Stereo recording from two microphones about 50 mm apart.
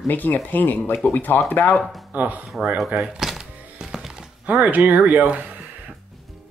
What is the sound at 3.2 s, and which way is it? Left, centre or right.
Music, centre.